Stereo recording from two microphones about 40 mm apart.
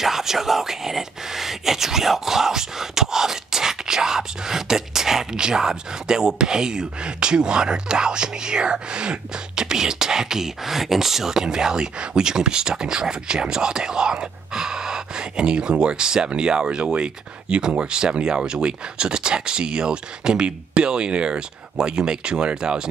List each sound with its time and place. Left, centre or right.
0.0 s speech: centre